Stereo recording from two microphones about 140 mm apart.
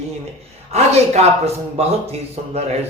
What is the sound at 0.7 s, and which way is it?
A man's voice, 50° right (ahead or behind).